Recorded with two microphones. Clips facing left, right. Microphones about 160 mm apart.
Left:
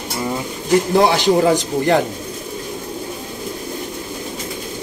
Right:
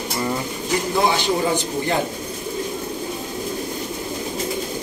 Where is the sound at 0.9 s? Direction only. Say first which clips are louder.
Left 5 dB; 80° left.